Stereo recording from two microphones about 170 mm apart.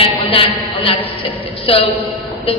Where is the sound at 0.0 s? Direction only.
30° left (ahead or behind).